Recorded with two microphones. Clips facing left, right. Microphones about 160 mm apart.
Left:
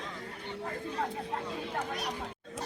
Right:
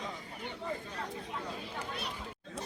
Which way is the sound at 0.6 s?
60° left (ahead or behind).